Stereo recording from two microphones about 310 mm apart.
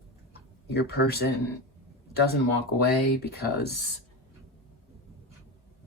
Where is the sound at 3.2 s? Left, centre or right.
Left.